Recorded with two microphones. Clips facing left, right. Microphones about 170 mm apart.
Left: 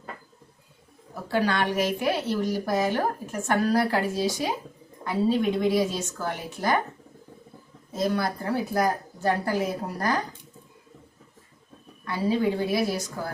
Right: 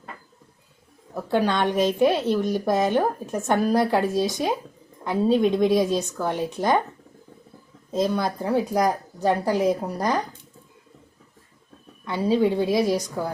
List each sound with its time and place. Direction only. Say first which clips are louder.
1.3 s speech: right 3 dB; 20° right (ahead or behind)
7.9 s speech: right 3 dB; 20° right (ahead or behind)
12.1 s speech: right 4 dB; 20° right (ahead or behind)